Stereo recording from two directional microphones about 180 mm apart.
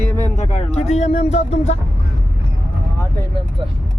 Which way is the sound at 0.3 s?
40° left (ahead or behind).